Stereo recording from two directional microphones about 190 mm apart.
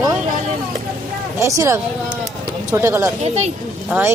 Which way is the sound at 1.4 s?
15° right (ahead or behind).